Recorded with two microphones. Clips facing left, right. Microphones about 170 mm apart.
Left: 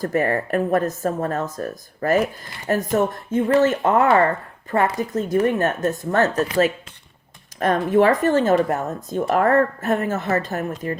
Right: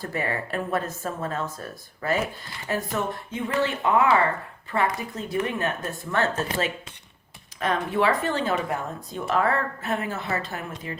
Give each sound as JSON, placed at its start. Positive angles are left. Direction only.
{"t": 0.0, "sound": "speech", "side_deg": 45}
{"t": 7.6, "sound": "speech", "side_deg": 45}